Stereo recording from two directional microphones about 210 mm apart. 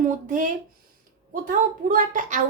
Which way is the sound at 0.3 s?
40° right (ahead or behind).